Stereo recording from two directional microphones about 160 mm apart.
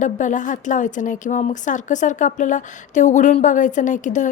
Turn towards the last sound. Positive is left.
turn(degrees=50)  # may be behind; listen again after turning